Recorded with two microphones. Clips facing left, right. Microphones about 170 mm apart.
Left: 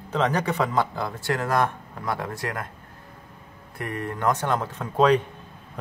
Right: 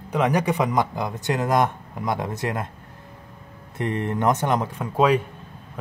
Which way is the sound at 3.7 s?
25° right (ahead or behind).